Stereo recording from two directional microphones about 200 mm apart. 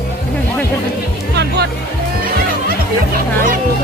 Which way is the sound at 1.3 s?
55° right (ahead or behind).